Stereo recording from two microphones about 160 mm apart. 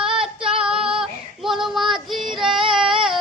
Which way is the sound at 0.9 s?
Centre (ahead or behind).